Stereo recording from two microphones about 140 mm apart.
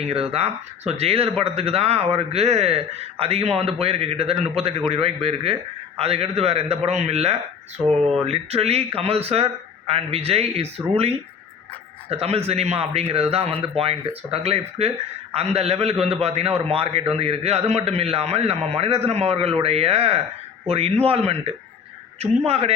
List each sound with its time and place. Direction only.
0.0 s a man's voice: 45° right (ahead or behind)